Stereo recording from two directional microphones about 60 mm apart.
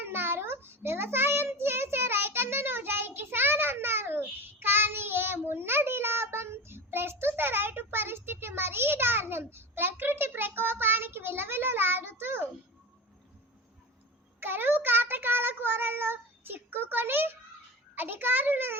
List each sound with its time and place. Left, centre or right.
0.0 s child singing: right
14.4 s child singing: right
17.9 s a sound: right